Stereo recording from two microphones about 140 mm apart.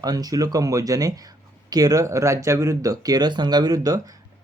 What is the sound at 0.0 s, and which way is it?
Speech, 25° right (ahead or behind).